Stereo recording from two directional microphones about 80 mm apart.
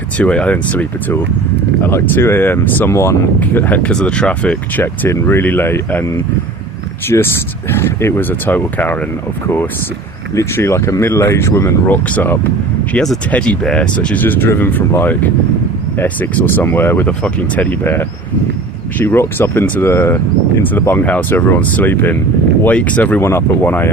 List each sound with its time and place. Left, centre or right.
0.2 s speech: centre; by 3.2 s left
3.4 s speech: left
4.8 s speech: left
10.3 s speech: left
17.1 s speech: centre